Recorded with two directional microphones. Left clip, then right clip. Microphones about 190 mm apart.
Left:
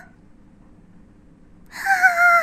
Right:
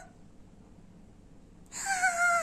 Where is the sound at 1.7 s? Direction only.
25° left (ahead or behind).